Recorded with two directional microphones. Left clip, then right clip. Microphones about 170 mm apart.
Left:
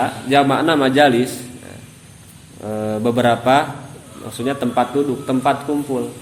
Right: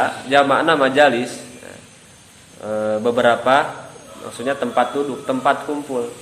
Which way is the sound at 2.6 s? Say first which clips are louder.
Right 2 dB; 25° left (ahead or behind).